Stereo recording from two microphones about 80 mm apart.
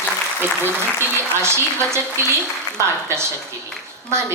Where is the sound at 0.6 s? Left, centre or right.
Right.